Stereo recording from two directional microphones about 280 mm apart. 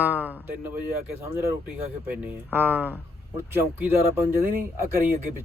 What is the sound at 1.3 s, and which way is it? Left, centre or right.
Speech, centre.